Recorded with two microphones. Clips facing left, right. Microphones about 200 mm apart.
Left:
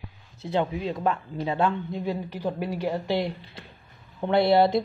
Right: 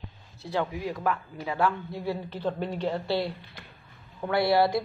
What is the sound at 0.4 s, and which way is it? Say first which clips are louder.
Speech: left 3 dB; 20° left (ahead or behind).